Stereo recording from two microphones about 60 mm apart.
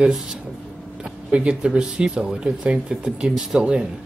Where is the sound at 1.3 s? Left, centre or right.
Centre.